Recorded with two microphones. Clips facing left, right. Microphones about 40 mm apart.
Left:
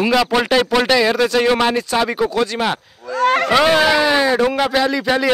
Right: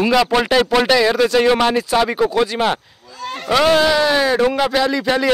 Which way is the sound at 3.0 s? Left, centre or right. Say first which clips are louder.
Left 13 dB; left.